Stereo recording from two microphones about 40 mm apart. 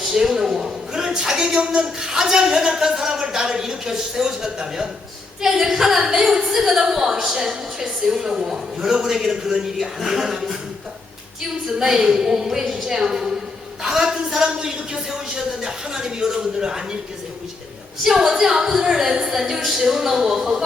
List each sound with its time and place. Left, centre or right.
0.0 s a woman's voice: centre
11.6 s a woman's voice: centre
18.0 s a woman's voice: centre
19.0 s a woman's voice: centre